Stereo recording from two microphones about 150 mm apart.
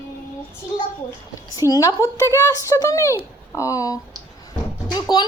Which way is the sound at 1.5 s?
25° left (ahead or behind).